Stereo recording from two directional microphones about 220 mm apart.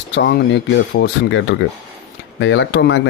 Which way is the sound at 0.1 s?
50° left (ahead or behind).